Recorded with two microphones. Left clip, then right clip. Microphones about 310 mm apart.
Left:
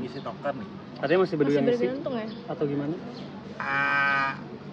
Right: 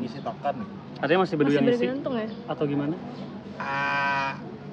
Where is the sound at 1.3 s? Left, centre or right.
Right.